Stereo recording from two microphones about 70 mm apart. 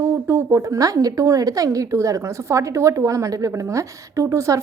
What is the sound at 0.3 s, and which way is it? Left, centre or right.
A woman's voice, right.